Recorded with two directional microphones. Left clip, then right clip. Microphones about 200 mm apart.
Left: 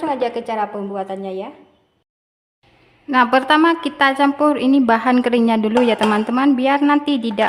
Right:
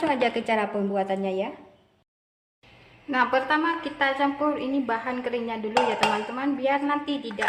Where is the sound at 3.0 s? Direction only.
40° left (ahead or behind).